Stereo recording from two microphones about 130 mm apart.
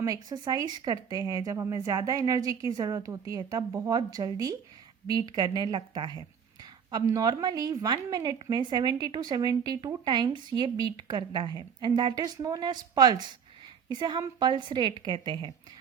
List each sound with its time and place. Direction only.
0.0 s a woman's voice: 30° right (ahead or behind)